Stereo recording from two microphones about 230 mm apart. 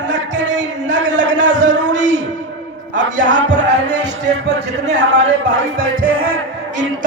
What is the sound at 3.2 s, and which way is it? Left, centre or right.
Music, right.